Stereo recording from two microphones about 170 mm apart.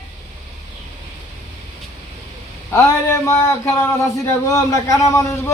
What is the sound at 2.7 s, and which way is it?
A man's voice, 15° left (ahead or behind).